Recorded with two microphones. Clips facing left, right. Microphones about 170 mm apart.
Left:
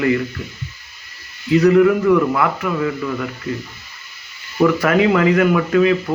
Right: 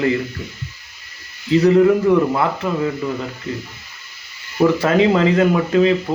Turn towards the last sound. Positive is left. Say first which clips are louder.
# even
turn(degrees=-25)  # may be behind; listen again after turning